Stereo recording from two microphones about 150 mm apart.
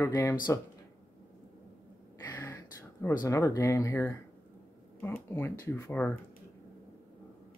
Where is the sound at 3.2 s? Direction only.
20° left (ahead or behind).